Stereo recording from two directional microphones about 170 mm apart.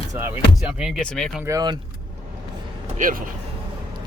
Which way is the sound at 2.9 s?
50° right (ahead or behind).